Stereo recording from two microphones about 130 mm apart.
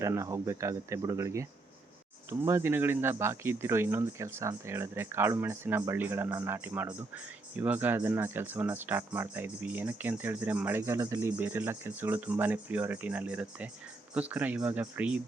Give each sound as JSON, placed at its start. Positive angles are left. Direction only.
{"t": 0.0, "sound": "speech", "side_deg": -20}